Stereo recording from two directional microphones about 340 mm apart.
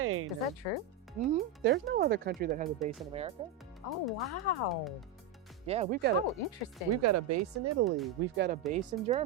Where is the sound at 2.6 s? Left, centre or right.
Centre.